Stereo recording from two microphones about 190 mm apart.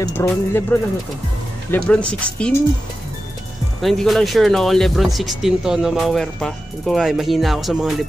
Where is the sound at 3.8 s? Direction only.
Centre (ahead or behind).